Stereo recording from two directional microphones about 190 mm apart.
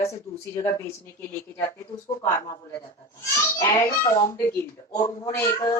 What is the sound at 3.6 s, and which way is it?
Speech, 15° left (ahead or behind).